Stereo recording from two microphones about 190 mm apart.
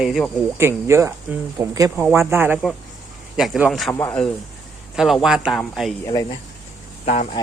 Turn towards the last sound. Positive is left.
turn(degrees=40)  # may be behind; listen again after turning